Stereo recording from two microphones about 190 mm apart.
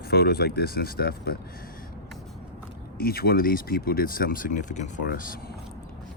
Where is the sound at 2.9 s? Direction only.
50° left (ahead or behind).